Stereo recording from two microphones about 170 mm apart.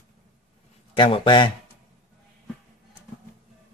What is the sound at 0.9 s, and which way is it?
Speech, 30° left (ahead or behind).